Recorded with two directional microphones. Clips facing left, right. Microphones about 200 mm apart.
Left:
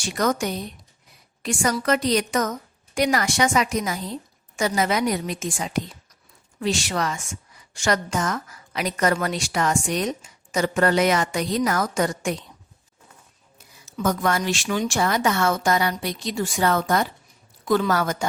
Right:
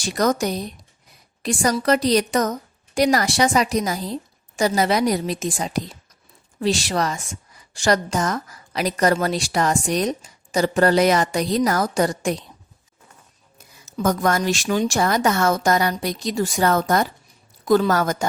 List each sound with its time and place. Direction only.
0.0 s a woman's voice: 35° right (ahead or behind)
13.8 s a woman's voice: 45° right (ahead or behind)